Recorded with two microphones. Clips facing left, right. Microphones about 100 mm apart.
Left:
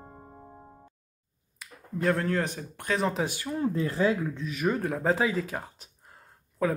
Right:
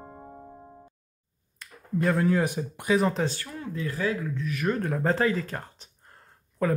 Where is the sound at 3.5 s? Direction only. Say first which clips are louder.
Left 5 dB; 35° left (ahead or behind).